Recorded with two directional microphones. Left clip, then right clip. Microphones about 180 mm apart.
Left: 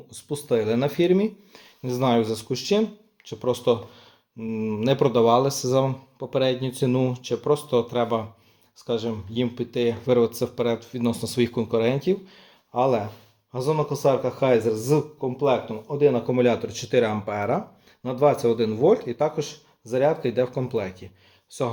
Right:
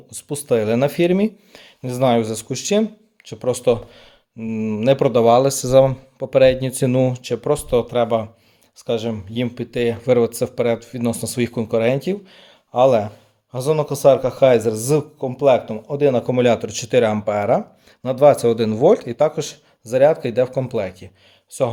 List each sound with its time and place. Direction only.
0.1 s speech: 55° right (ahead or behind); by 12.5 s 35° right (ahead or behind)
12.7 s speech: 60° right (ahead or behind)
13.5 s speech: 80° right; by 21.7 s 50° right (ahead or behind)